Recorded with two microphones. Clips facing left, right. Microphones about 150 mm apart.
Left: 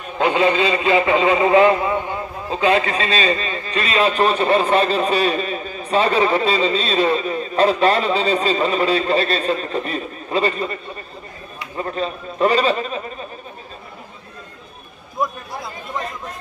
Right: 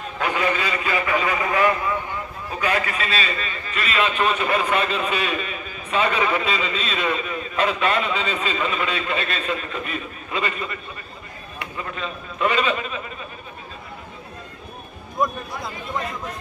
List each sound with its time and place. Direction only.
0.2 s a man's voice: 25° left (ahead or behind)
15.2 s a man's voice: centre (ahead or behind)